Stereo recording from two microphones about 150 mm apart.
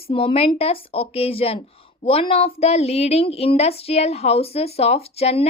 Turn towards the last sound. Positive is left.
turn(degrees=40)  # may be behind; listen again after turning